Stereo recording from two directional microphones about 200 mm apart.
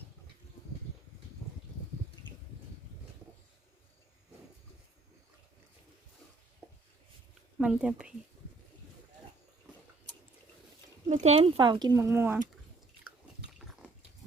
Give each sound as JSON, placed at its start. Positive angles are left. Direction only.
{"t": 7.6, "sound": "speech", "side_deg": -5}
{"t": 11.1, "sound": "speech", "side_deg": -35}